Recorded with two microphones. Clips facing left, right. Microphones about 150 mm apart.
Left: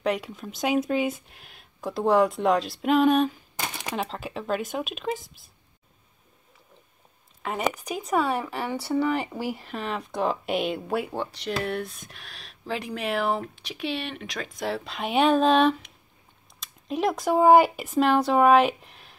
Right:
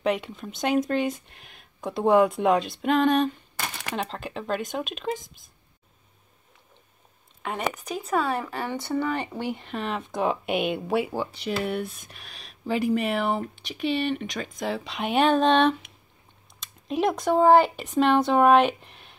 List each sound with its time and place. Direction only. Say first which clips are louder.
0.0 s speech: right 1 dB; centre (ahead or behind)
3.5 s shuffling cards: left 1 dB; 15° left (ahead or behind)
3.9 s speech: even; 5° left (ahead or behind)
7.4 s speech: left 2 dB; 5° left (ahead or behind)